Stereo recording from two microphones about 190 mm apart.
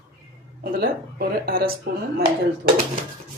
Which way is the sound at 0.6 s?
55° right (ahead or behind).